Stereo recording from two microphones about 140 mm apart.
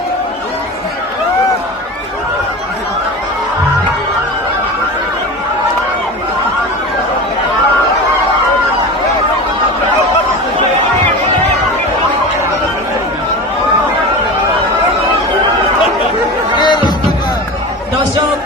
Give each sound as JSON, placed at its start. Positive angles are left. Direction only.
{"t": 16.6, "sound": "music", "side_deg": 30}